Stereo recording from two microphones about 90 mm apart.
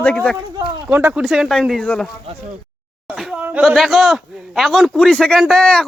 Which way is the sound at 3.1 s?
Centre (ahead or behind).